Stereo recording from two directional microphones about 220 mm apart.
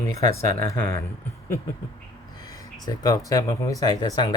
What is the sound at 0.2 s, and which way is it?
Speech, 10° left (ahead or behind).